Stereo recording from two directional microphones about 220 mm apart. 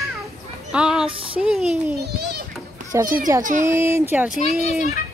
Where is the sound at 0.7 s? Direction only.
5° right (ahead or behind).